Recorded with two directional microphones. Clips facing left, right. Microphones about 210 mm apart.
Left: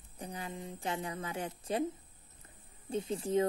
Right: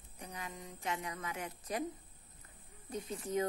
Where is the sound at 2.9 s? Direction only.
30° left (ahead or behind).